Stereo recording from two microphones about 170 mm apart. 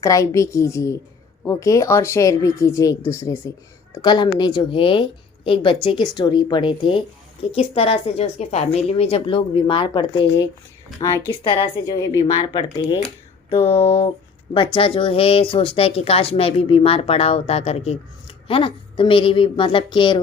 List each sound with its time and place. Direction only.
0.0 s a woman's voice: 20° left (ahead or behind)
13.6 s speech: 15° left (ahead or behind)
14.5 s speech: 30° left (ahead or behind)